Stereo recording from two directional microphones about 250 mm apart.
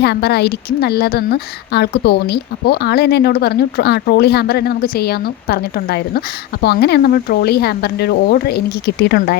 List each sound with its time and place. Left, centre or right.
0.0 s a woman's voice: left